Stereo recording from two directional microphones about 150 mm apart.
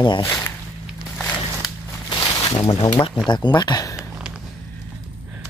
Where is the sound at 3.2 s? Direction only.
30° left (ahead or behind).